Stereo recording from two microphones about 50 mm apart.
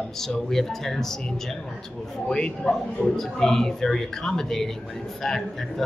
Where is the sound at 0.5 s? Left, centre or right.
Centre.